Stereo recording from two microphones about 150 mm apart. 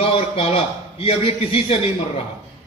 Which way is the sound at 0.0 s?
40° left (ahead or behind).